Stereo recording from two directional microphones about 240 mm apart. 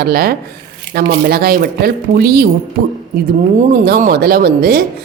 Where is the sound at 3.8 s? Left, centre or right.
Right.